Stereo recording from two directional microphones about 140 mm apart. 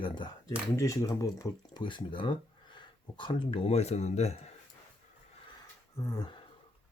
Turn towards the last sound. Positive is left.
turn(degrees=25)  # may be behind; listen again after turning